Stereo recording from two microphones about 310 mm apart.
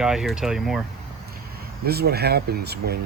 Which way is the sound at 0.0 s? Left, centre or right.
Centre.